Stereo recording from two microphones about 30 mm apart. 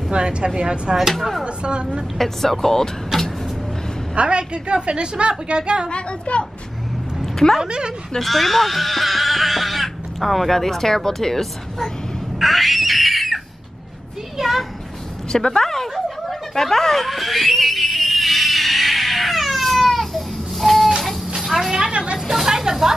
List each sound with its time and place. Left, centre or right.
0.1 s a woman's voice: right
2.1 s speech: centre
4.1 s a woman's voice: right
5.9 s speech: left
7.6 s speech: right
8.2 s speech: centre
12.4 s a sound: centre
14.4 s speech: centre
15.3 s speech: centre
16.5 s a sound: centre
21.5 s speech: centre